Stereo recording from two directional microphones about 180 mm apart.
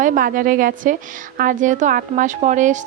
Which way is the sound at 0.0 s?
50° right (ahead or behind).